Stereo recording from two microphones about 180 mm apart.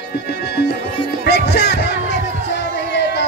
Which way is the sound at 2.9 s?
70° left (ahead or behind).